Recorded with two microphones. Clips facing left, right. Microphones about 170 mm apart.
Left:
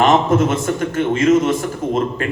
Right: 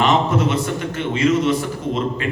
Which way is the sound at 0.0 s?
45° left (ahead or behind).